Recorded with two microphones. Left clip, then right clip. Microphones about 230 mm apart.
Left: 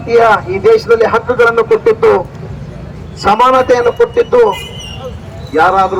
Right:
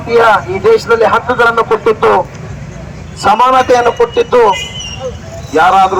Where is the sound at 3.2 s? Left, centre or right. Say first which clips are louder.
Right 1 dB; right.